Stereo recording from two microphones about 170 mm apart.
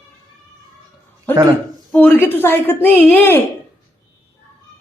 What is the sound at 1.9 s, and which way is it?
A woman's voice, 10° left (ahead or behind).